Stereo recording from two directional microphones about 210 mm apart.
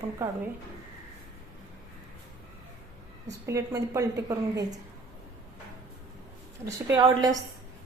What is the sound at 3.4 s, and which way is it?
A woman's voice, 15° right (ahead or behind).